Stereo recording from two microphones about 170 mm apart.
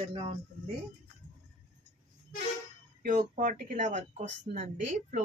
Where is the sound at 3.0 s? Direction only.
50° right (ahead or behind).